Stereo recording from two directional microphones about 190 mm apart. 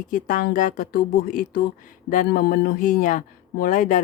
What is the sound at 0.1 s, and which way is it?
Speech, 45° left (ahead or behind).